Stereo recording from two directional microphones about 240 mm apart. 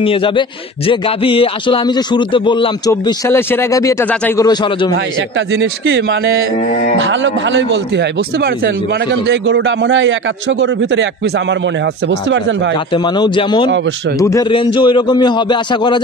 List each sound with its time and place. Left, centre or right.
0.0 s music: left; by 4.5 s centre
4.5 s a man's voice: centre
5.5 s speech: right
6.7 s music: left
7.0 s speech: right
12.9 s music: centre